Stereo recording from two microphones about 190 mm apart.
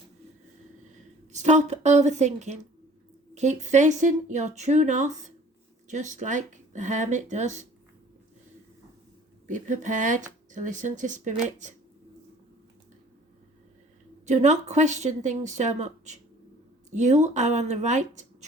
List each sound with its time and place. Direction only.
1.3 s speech: 40° right (ahead or behind)
9.5 s speech: 40° right (ahead or behind)
14.3 s speech: 40° right (ahead or behind)